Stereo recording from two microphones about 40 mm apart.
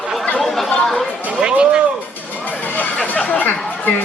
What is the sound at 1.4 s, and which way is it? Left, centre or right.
Speech, right.